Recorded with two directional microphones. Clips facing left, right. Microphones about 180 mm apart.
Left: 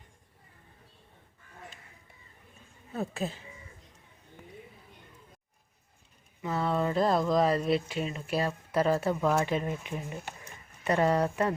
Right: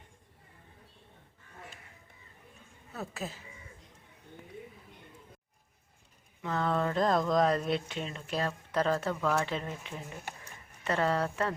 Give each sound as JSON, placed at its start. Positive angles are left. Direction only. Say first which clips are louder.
{"t": 2.9, "sound": "speech", "louder": "left 6 dB", "side_deg": 25}
{"t": 6.4, "sound": "speech", "louder": "left 1 dB", "side_deg": 5}